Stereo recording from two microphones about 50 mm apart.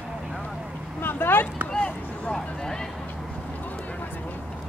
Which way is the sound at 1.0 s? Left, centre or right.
Left.